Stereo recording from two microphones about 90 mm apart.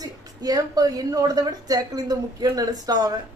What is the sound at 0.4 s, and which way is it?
A woman's voice, 45° right (ahead or behind).